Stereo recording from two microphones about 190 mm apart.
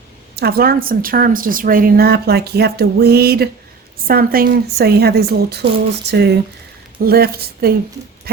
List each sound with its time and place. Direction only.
0.3 s speech: 55° right (ahead or behind)